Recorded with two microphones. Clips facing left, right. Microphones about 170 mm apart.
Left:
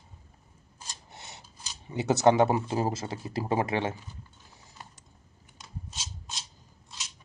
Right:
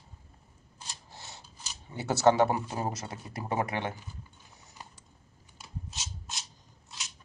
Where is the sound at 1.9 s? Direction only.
20° left (ahead or behind).